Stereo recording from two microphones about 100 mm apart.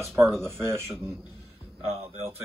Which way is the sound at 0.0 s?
Centre (ahead or behind).